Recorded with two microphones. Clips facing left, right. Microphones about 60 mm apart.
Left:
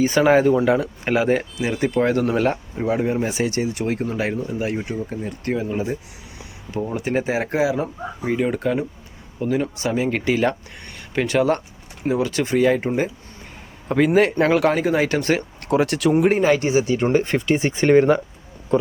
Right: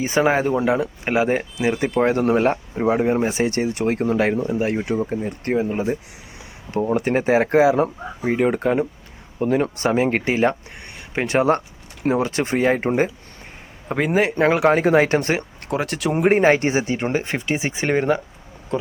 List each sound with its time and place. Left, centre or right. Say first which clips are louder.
0.0 s speech: left 3 dB; centre; by 4.1 s right
4.1 s speech: right 5 dB; right
13.8 s speech: left 3 dB; centre
14.8 s speech: right 3 dB; right
15.1 s speech: even; right
15.6 s speech: left 7 dB; centre
16.1 s speech: right 2 dB; right; by 18.2 s centre